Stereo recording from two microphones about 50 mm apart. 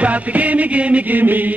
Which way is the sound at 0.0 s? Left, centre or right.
Right.